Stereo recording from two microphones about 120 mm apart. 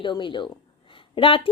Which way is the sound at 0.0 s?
45° left (ahead or behind).